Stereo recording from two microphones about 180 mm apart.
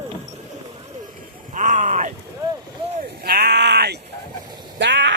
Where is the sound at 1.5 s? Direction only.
45° right (ahead or behind).